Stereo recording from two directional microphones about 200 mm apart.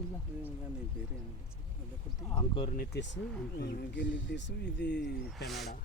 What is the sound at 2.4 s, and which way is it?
Speech, 25° left (ahead or behind).